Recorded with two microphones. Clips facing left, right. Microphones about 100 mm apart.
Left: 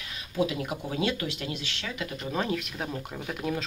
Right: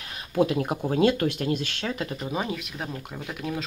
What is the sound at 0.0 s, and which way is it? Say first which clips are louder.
Speech: right 5 dB; 45° right (ahead or behind).